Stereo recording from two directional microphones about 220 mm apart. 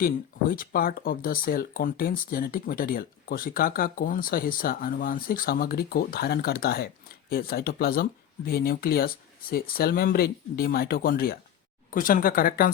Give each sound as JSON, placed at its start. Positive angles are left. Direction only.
{"t": 0.5, "sound": "speech", "side_deg": 40}